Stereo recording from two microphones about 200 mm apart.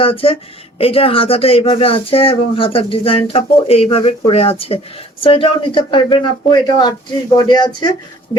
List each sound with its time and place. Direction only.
0.0 s speech: 30° left (ahead or behind)